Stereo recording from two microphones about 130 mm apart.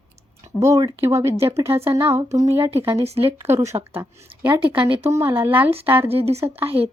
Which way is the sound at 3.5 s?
20° right (ahead or behind).